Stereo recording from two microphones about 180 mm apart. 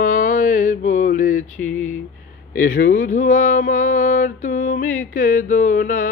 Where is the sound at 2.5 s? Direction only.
50° left (ahead or behind).